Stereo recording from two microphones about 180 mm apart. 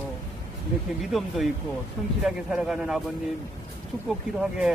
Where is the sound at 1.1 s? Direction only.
Centre (ahead or behind).